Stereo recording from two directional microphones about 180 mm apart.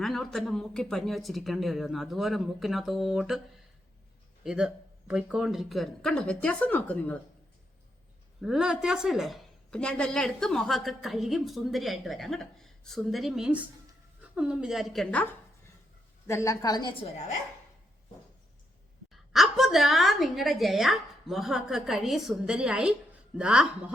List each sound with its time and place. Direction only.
0.0 s a woman's voice: centre (ahead or behind)
4.4 s a woman's voice: 5° right (ahead or behind)
8.4 s a woman's voice: 5° right (ahead or behind); by 17.3 s 40° left (ahead or behind)
19.3 s a woman's voice: centre (ahead or behind)